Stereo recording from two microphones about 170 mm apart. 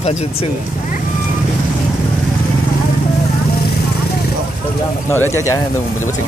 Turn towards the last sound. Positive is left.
turn(degrees=15)  # may be behind; listen again after turning